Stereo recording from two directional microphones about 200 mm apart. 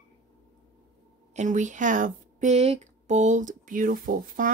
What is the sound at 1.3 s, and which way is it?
Speech, 40° right (ahead or behind).